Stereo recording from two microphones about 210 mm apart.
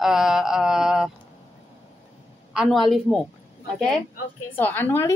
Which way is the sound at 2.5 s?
Centre (ahead or behind).